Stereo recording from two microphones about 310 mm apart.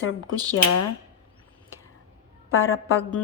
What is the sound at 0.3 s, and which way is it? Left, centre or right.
Speech, centre.